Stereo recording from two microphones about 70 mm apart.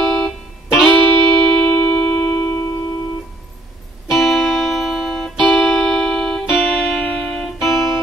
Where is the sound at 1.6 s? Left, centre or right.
Centre.